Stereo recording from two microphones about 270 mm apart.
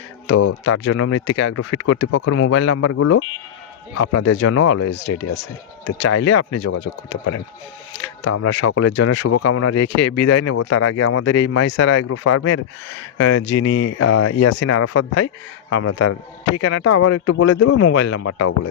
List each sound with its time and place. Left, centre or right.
0.6 s speech: left
2.4 s speech: left
4.9 s speech: left
8.2 s speech: left
11.3 s speech: left
12.0 s speech: left
13.4 s speech: left
18.1 s speech: left